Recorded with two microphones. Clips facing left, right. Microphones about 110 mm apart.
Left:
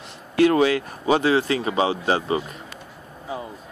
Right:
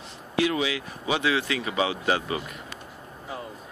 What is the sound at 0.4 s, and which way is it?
Speech, 50° left (ahead or behind).